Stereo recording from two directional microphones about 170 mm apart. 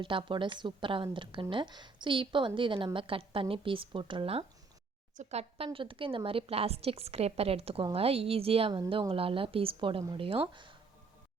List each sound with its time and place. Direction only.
0.0 s a woman's voice: 30° right (ahead or behind)